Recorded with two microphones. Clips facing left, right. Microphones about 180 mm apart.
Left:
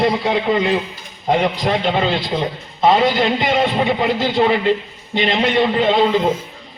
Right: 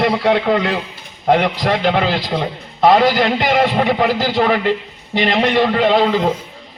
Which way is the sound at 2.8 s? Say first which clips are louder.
Right 2 dB; 70° right (ahead or behind).